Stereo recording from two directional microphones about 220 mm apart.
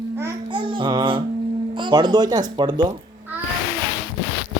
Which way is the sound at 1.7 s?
20° right (ahead or behind).